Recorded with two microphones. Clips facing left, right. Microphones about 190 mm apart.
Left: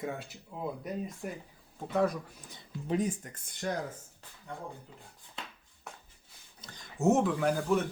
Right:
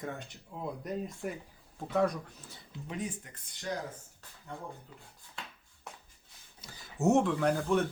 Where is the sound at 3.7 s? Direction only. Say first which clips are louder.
Left 2 dB; 55° left (ahead or behind).